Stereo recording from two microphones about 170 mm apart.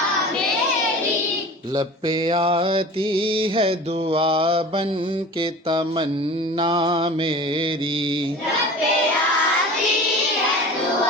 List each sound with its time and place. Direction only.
1.7 s mantra: 30° right (ahead or behind)
5.4 s music: 30° right (ahead or behind)
6.6 s mantra: 30° right (ahead or behind)